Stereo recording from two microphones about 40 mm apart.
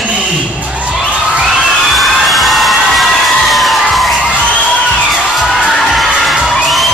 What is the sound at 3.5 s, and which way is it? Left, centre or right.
Music, centre.